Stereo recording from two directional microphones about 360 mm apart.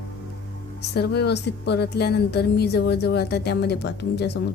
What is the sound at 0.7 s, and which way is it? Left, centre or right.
Speech, left.